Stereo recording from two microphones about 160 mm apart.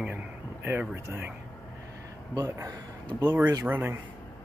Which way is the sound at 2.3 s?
20° right (ahead or behind).